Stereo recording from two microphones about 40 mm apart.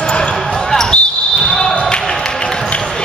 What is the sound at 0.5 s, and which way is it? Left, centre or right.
Basketball bounce, centre.